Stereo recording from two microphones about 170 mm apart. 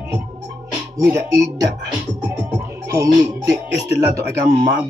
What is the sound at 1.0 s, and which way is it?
Music, 15° right (ahead or behind).